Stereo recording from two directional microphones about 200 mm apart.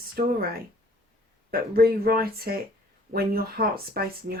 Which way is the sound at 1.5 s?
50° right (ahead or behind).